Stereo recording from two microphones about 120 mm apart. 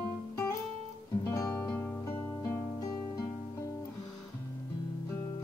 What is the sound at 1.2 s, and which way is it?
Music, 30° left (ahead or behind).